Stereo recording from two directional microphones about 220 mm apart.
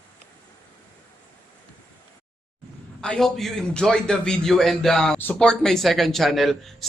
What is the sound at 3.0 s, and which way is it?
A man's voice, centre (ahead or behind).